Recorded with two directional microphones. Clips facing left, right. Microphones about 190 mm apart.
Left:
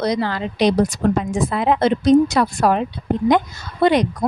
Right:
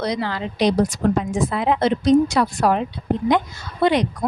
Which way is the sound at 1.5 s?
55° left (ahead or behind).